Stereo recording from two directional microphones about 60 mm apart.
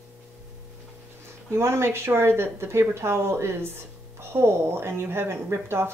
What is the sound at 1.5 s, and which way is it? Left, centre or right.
A woman's voice, right.